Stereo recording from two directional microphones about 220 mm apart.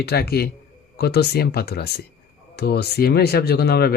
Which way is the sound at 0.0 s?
45° left (ahead or behind).